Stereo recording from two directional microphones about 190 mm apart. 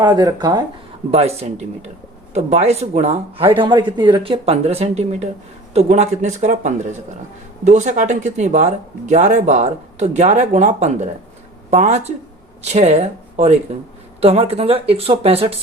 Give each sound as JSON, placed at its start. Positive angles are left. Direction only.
{"t": 0.0, "sound": "speech", "side_deg": -20}
{"t": 1.1, "sound": "speech", "side_deg": -35}